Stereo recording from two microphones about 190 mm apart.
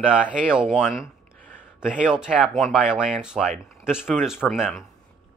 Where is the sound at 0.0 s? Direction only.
5° right (ahead or behind).